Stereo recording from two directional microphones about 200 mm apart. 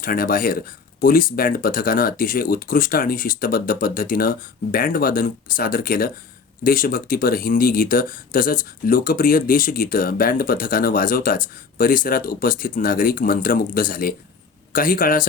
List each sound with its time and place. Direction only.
0.0 s speech: 45° left (ahead or behind)